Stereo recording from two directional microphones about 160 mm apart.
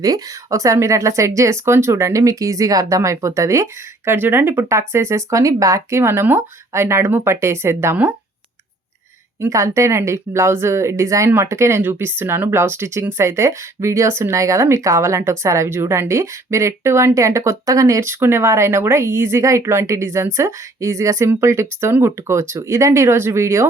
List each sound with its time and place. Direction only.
0.0 s speech: 20° right (ahead or behind)
9.4 s speech: 20° right (ahead or behind)